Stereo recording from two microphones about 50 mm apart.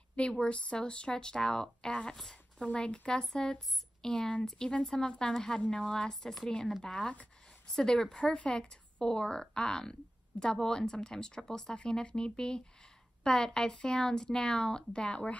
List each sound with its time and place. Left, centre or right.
0.1 s speech: centre